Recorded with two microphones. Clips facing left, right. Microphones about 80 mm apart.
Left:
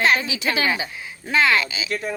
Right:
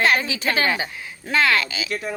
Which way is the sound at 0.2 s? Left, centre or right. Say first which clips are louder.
Right 1 dB; right.